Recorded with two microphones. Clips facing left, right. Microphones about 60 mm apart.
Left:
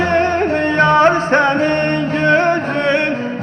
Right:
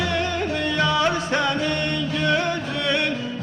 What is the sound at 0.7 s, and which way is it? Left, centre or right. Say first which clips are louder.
Music: left 10 dB; left.